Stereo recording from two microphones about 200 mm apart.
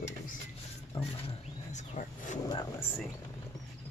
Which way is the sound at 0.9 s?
30° left (ahead or behind).